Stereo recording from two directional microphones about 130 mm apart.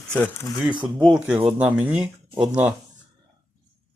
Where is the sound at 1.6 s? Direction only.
10° right (ahead or behind).